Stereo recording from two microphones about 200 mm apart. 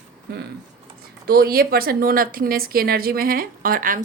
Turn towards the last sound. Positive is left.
turn(degrees=-45)  # may be behind; listen again after turning